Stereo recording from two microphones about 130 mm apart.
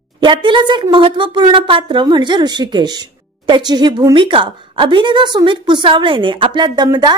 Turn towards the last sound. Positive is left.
turn(degrees=-35)  # may be behind; listen again after turning